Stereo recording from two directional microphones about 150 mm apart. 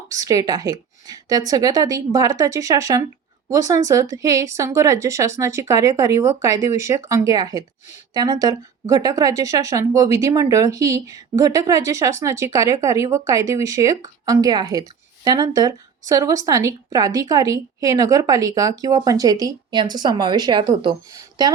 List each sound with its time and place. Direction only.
0.1 s speech: 25° right (ahead or behind)